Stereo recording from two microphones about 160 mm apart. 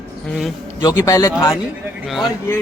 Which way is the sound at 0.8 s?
15° left (ahead or behind).